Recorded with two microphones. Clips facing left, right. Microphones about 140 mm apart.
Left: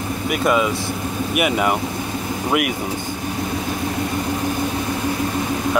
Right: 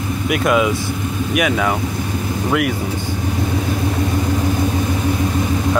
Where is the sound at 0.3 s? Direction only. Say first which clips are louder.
Right 2 dB; centre (ahead or behind).